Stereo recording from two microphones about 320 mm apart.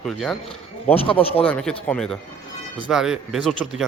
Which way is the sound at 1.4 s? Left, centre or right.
Centre.